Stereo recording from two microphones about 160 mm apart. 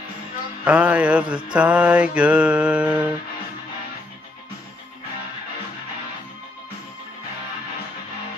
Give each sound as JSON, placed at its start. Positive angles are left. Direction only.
{"t": 0.7, "sound": "mantra", "side_deg": -10}